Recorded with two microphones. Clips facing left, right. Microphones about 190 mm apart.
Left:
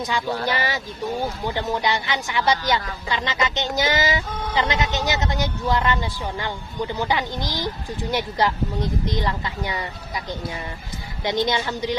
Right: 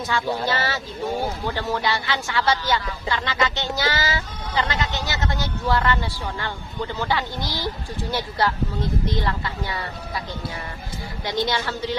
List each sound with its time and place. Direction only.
0.4 s speech: 15° left (ahead or behind)
11.2 s speech: 20° left (ahead or behind)